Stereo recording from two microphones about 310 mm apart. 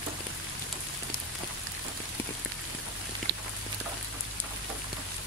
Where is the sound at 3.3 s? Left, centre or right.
Right.